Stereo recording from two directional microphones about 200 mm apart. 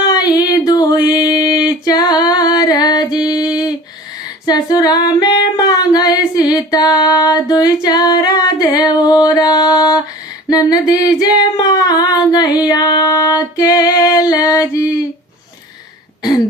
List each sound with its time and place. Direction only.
0.1 s a sound: 20° left (ahead or behind)
1.1 s singing: 20° left (ahead or behind)
4.4 s female singing: 20° left (ahead or behind)
10.5 s singing: 20° left (ahead or behind)